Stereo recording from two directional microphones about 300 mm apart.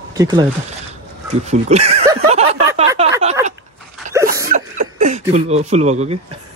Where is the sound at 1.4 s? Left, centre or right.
Right.